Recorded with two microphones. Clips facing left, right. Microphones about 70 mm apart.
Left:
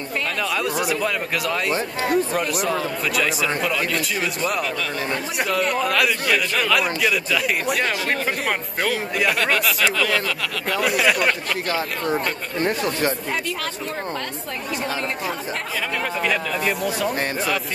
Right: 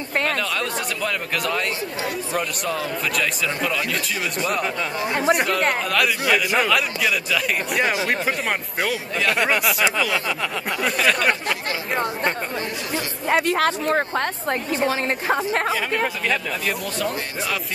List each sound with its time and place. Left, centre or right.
0.4 s a man's voice: centre
5.9 s a man's voice: centre
10.8 s speech: centre
12.1 s speech: left
13.3 s speech: right
16.3 s speech: centre